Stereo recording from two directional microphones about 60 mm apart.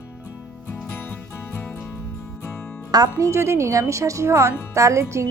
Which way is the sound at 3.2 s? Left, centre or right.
Right.